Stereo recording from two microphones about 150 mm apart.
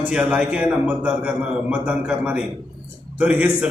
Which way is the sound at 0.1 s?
10° right (ahead or behind).